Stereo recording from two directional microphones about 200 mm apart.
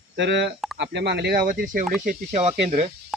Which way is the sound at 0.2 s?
60° right (ahead or behind).